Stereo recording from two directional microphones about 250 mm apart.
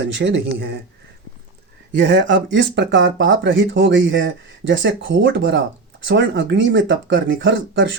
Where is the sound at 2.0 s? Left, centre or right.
Right.